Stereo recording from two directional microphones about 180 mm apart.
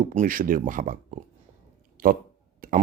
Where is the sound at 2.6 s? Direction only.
50° right (ahead or behind).